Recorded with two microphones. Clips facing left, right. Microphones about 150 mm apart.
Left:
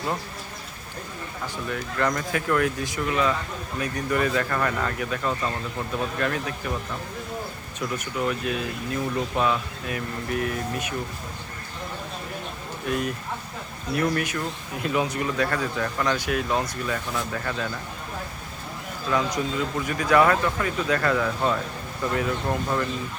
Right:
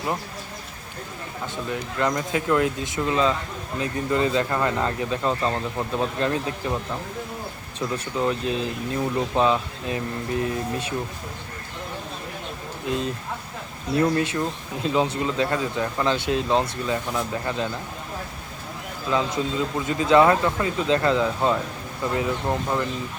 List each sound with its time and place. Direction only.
1.6 s speech: 20° right (ahead or behind)
7.8 s speech: 25° right (ahead or behind)
12.8 s speech: 25° right (ahead or behind)
19.1 s speech: 25° right (ahead or behind)